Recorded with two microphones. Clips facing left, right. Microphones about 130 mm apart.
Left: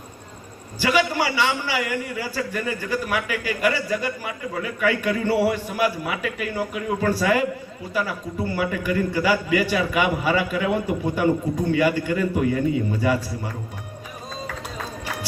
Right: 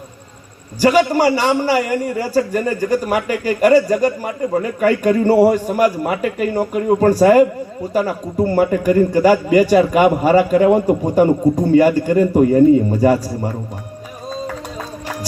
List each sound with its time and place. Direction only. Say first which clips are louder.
0.8 s a man's voice: right 8 dB; 40° right (ahead or behind)